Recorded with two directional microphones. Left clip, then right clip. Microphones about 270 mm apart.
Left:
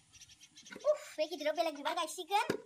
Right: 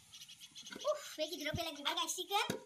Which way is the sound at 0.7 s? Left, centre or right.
Centre.